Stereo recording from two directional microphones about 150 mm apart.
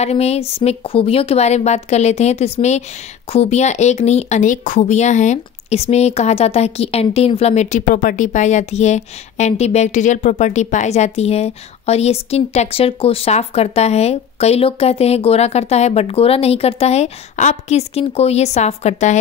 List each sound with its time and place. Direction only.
0.0 s speech: 45° left (ahead or behind)